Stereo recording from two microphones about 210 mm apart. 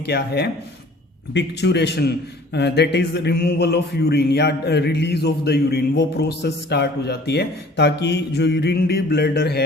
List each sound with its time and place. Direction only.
0.0 s a man's voice: 50° left (ahead or behind)